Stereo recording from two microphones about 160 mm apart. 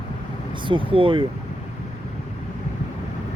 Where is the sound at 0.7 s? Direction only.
35° right (ahead or behind).